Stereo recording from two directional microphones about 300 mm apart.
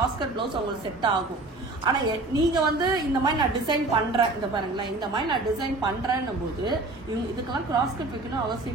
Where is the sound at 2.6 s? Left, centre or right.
Centre.